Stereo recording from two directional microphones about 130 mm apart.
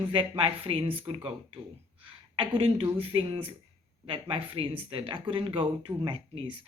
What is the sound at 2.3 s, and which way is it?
Speech, 40° right (ahead or behind).